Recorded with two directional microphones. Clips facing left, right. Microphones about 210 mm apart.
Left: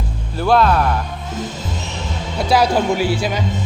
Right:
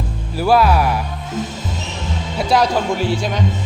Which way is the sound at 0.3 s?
5° right (ahead or behind).